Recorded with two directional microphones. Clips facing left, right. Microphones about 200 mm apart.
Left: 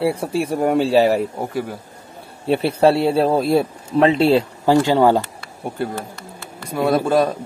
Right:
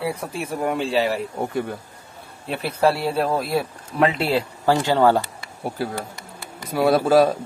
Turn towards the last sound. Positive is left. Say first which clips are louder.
# right 1 dB
turn(degrees=0)  # may be behind; listen again after turning